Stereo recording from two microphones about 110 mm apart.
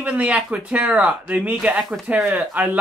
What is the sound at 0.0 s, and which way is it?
Speech, 10° right (ahead or behind).